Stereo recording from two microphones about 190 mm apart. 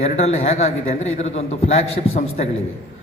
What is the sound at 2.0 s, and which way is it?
Speech, 45° left (ahead or behind).